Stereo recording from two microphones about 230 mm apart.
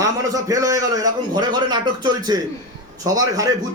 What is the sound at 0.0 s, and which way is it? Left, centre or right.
A man's voice, centre.